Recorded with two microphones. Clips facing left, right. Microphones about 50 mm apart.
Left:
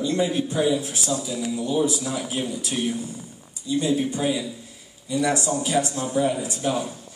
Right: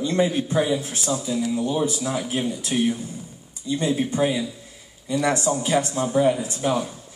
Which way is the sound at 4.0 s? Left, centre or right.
Right.